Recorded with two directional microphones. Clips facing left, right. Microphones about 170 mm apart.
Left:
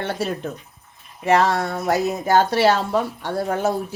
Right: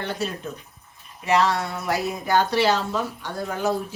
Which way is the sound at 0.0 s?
60° left (ahead or behind).